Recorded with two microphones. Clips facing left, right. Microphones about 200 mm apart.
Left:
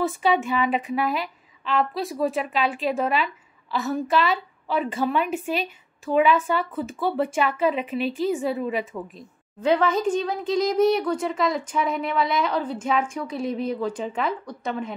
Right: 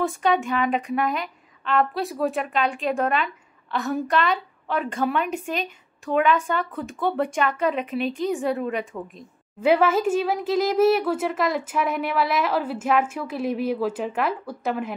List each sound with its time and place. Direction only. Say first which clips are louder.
0.0 s a woman's voice: even; 5° left (ahead or behind)
9.6 s a woman's voice: right 2 dB; 10° right (ahead or behind)